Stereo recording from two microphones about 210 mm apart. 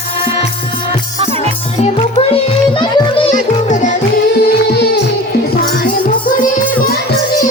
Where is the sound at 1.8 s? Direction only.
25° left (ahead or behind).